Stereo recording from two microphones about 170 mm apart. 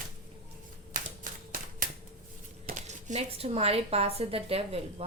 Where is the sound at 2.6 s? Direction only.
45° right (ahead or behind).